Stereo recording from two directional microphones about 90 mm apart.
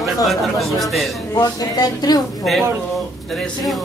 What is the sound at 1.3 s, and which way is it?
Speech, 45° left (ahead or behind).